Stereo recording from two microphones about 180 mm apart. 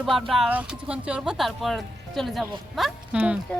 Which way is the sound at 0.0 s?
Centre (ahead or behind).